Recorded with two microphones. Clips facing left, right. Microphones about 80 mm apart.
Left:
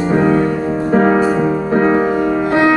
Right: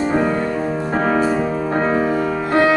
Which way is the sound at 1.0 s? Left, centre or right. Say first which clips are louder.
Left 2 dB; left.